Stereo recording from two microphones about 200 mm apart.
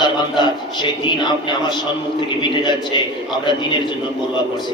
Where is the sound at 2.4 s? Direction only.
20° left (ahead or behind).